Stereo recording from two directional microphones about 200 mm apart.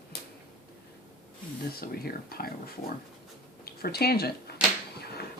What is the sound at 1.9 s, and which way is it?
Speech, 50° left (ahead or behind).